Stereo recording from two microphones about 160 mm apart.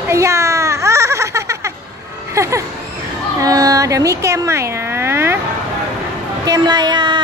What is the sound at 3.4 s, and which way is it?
Speech, 20° right (ahead or behind).